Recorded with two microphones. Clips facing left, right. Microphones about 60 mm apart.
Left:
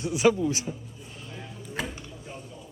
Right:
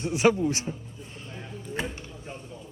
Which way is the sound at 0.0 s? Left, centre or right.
Right.